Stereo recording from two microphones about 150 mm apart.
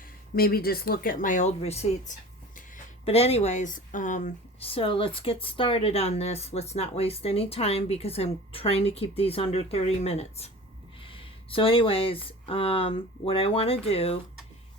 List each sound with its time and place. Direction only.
0.3 s speech: 90° left; by 4.3 s 60° left (ahead or behind)
4.6 s speech: 40° left (ahead or behind)